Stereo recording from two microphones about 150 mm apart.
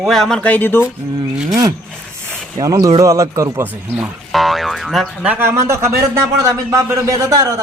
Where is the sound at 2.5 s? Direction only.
25° right (ahead or behind).